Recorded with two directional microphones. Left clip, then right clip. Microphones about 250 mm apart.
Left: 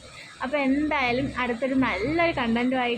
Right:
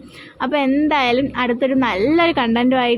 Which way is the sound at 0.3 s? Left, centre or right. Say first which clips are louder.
Right 7 dB; centre.